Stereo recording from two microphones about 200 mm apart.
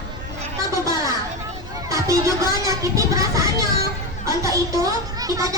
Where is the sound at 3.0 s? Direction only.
15° right (ahead or behind).